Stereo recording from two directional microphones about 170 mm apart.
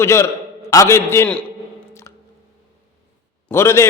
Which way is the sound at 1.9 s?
15° left (ahead or behind).